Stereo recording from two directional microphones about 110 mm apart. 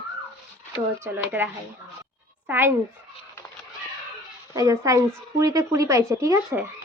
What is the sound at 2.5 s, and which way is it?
Speech, 20° right (ahead or behind).